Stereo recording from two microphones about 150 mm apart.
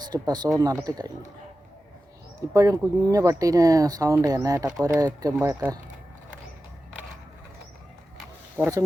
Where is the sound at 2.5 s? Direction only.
20° right (ahead or behind).